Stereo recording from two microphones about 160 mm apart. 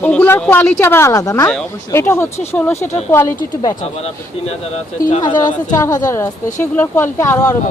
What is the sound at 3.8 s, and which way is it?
Speech, 40° left (ahead or behind).